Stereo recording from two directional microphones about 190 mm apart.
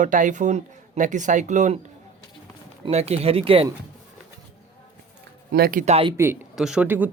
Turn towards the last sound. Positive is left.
turn(degrees=-10)  # may be behind; listen again after turning